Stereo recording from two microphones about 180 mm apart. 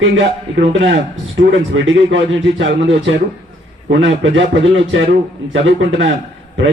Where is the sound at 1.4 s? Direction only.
90° right.